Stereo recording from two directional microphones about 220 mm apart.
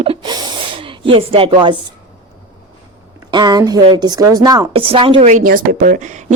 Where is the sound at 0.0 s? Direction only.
25° right (ahead or behind).